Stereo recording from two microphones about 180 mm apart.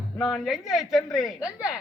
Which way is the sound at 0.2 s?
Centre (ahead or behind).